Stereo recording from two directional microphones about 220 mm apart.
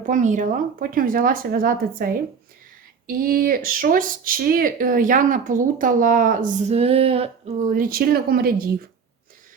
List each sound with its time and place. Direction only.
0.0 s speech: 35° right (ahead or behind)
3.1 s speech: 40° right (ahead or behind)